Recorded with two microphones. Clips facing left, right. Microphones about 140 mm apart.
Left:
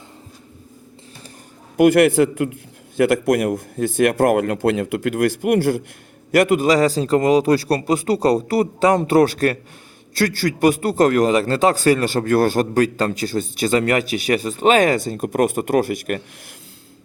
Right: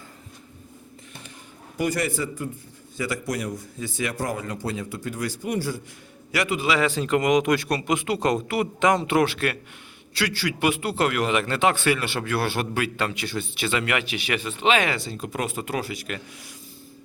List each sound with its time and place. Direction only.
1.7 s a man's voice: 60° left (ahead or behind)
6.3 s a man's voice: 50° left (ahead or behind)